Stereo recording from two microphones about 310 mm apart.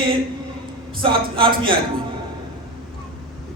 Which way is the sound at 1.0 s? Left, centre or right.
Centre.